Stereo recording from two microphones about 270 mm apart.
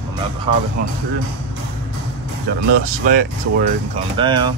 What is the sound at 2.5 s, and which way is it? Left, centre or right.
Speech, right.